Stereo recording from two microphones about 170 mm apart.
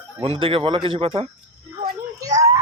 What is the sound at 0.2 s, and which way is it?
Speech, 30° right (ahead or behind).